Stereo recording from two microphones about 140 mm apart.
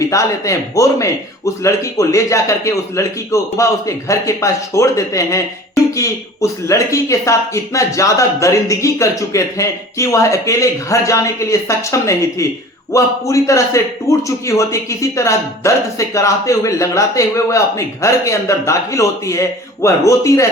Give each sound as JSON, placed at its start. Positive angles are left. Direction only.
{"t": 0.0, "sound": "a man's voice", "side_deg": 25}